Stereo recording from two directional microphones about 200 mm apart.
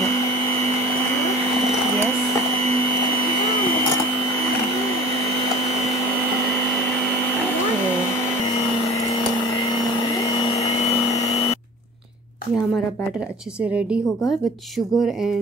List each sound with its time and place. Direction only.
11.1 s a sound: 35° left (ahead or behind)
13.6 s a woman's voice: 5° right (ahead or behind)
15.0 s a woman's voice: centre (ahead or behind)